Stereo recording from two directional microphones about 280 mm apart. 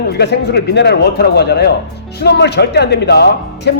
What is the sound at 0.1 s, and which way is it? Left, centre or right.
Speech, left.